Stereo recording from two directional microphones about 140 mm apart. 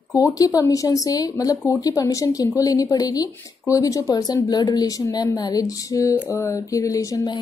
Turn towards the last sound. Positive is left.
turn(degrees=25)  # may be behind; listen again after turning